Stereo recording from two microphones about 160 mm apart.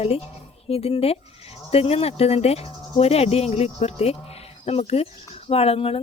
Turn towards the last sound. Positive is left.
turn(degrees=35)  # may be behind; listen again after turning